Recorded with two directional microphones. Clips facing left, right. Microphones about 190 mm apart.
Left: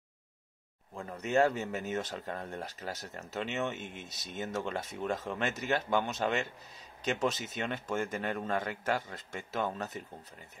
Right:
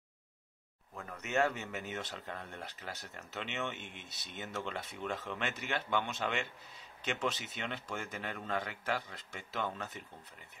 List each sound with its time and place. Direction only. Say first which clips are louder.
0.9 s speech: left 5 dB; 30° left (ahead or behind)